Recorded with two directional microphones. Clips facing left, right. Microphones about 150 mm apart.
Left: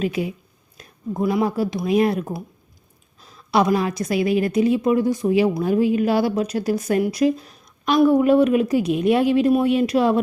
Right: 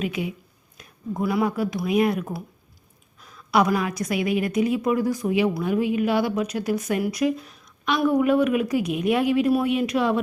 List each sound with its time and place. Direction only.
0.0 s a woman's voice: 35° left (ahead or behind)
0.8 s a sound: 35° left (ahead or behind)
1.2 s a woman's voice: 25° left (ahead or behind)